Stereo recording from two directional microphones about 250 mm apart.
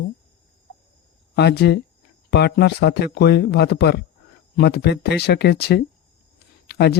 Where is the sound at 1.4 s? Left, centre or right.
Left.